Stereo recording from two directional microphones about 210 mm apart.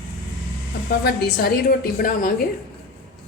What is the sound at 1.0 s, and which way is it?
A woman's voice, 45° left (ahead or behind).